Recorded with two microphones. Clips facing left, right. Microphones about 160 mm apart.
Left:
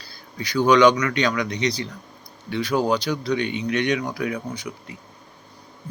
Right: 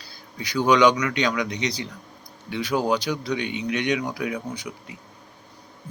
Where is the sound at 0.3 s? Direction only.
15° right (ahead or behind).